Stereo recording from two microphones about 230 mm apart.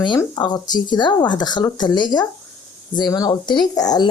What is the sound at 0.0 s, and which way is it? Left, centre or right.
Speech, centre.